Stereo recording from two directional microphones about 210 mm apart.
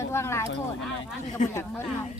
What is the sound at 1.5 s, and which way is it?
Speech, 10° left (ahead or behind).